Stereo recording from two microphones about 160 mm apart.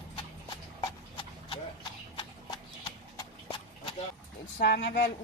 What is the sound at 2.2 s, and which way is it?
Horse, 30° left (ahead or behind).